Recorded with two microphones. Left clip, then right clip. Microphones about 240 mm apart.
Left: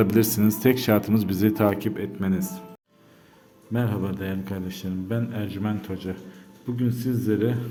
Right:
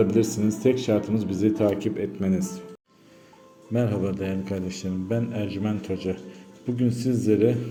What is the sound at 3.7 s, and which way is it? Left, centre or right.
A man's voice, centre.